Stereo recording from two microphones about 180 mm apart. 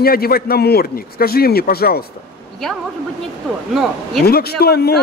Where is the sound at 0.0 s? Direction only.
55° left (ahead or behind).